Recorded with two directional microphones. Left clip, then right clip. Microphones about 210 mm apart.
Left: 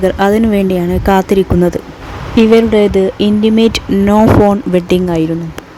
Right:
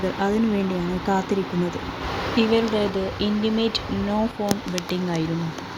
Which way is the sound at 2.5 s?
55° left (ahead or behind).